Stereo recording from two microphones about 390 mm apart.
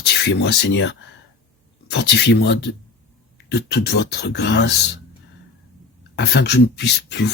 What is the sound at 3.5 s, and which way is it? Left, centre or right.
Speech, left.